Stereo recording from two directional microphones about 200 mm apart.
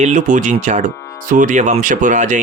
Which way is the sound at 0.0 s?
40° right (ahead or behind).